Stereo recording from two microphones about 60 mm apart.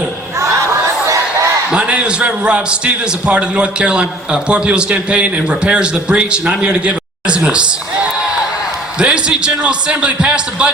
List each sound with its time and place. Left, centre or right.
1.0 s battle cry: right
1.7 s a man's voice: centre
9.0 s a man's voice: centre